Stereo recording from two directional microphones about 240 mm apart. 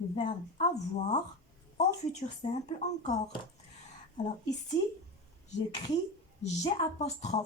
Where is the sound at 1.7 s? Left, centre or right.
Left.